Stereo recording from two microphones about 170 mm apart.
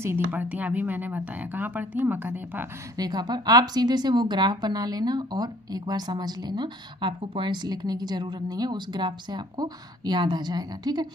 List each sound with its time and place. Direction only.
0.0 s speech: 10° right (ahead or behind)
3.0 s a woman's voice: 25° right (ahead or behind)